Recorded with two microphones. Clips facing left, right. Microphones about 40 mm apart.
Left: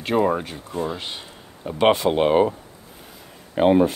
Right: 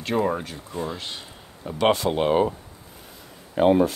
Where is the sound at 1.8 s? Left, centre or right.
Left.